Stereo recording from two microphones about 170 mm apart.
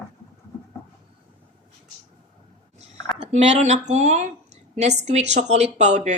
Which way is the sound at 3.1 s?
35° right (ahead or behind).